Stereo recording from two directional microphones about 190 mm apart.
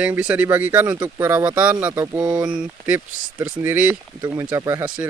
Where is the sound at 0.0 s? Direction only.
10° right (ahead or behind).